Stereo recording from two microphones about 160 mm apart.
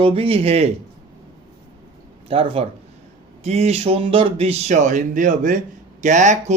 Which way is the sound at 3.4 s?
40° right (ahead or behind).